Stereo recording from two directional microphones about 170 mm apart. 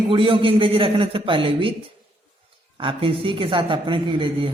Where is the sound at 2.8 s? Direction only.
30° right (ahead or behind).